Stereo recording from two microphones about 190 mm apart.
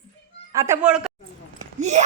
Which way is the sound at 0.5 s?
15° right (ahead or behind).